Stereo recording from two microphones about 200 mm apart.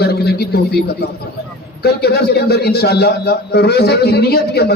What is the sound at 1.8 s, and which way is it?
A man's voice, 55° left (ahead or behind).